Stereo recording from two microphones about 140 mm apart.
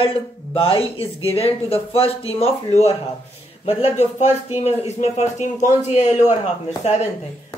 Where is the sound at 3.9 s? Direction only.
50° left (ahead or behind).